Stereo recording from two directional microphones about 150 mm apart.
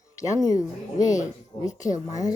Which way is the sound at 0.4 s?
25° left (ahead or behind).